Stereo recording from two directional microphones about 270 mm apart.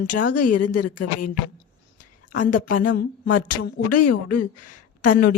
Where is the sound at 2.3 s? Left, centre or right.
Left.